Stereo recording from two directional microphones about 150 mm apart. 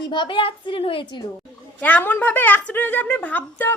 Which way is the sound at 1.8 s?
10° left (ahead or behind).